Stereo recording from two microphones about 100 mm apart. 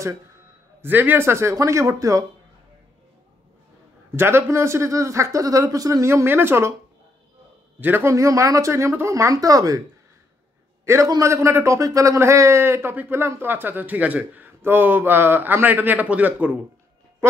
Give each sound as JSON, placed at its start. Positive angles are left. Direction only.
{"t": 0.8, "sound": "speech", "side_deg": -20}
{"t": 4.1, "sound": "speech", "side_deg": -25}
{"t": 7.8, "sound": "speech", "side_deg": -20}
{"t": 8.1, "sound": "speech", "side_deg": -30}
{"t": 11.1, "sound": "speech", "side_deg": -30}
{"t": 17.2, "sound": "speech", "side_deg": -25}